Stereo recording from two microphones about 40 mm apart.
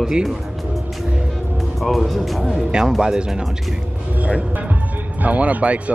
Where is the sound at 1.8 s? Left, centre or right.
Centre.